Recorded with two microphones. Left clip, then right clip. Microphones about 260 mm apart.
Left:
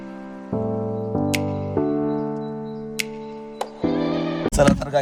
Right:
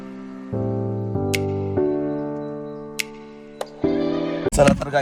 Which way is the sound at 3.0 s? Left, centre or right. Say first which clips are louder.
Even; centre.